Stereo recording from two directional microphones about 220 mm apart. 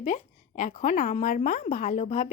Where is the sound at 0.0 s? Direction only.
35° left (ahead or behind).